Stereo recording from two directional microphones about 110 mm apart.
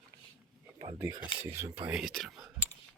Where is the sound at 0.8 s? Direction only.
70° right (ahead or behind).